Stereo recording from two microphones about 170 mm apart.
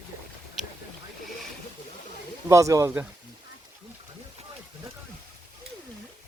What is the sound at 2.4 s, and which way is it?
Speech, 20° right (ahead or behind).